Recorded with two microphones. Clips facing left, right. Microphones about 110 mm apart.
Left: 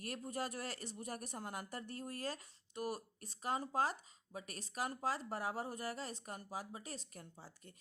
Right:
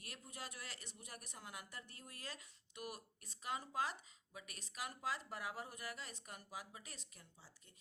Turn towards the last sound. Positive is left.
turn(degrees=50)  # may be behind; listen again after turning